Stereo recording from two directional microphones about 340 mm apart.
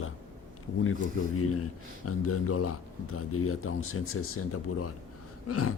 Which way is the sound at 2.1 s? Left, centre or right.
Left.